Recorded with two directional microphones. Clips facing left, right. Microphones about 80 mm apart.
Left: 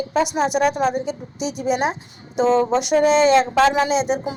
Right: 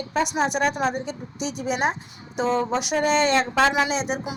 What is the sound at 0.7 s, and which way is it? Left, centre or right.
A woman's voice, right.